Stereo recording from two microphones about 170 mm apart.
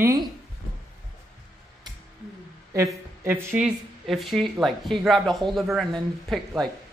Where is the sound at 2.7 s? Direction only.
15° right (ahead or behind).